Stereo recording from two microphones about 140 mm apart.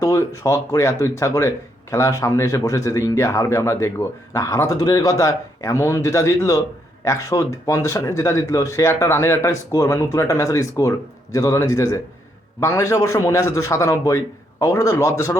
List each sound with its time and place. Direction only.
0.0 s a man's voice: 20° left (ahead or behind)